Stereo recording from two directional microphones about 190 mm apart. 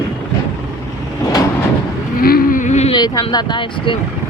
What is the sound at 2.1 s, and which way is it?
Vehicle, 50° left (ahead or behind).